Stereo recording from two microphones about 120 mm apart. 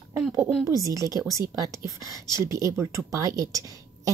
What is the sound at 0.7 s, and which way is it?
A woman's voice, 30° right (ahead or behind).